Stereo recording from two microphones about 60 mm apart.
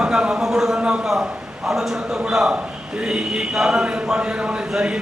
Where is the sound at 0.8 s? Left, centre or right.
Centre.